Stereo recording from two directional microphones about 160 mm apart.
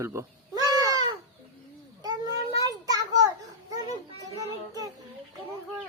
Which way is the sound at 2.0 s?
25° right (ahead or behind).